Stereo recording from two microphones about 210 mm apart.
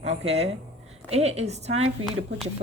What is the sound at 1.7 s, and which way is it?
Speech, 70° right (ahead or behind).